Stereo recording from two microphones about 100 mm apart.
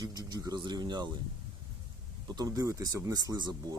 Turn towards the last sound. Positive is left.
turn(degrees=-45)  # may be behind; listen again after turning